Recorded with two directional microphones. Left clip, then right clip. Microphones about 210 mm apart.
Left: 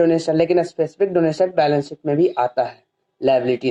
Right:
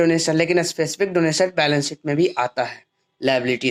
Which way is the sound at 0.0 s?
20° right (ahead or behind).